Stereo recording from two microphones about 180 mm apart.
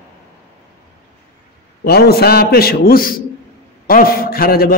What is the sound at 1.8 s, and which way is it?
A man's voice, 60° left (ahead or behind).